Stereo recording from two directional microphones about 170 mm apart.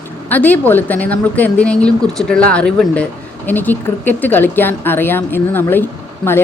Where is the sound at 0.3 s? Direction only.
10° left (ahead or behind).